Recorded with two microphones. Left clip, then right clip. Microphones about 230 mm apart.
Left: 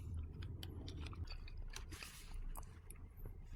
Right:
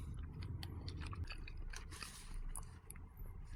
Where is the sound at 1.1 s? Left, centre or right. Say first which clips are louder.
Right 4 dB; right.